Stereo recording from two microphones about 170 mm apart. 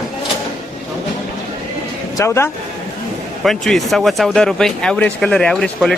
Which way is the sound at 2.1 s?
15° left (ahead or behind).